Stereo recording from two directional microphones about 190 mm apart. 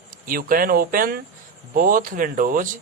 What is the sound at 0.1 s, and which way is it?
A man's voice, 45° right (ahead or behind).